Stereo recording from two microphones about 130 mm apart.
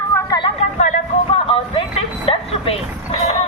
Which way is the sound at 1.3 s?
45° left (ahead or behind).